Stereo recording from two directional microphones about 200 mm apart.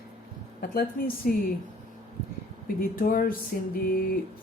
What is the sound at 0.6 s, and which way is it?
Speech, 50° left (ahead or behind).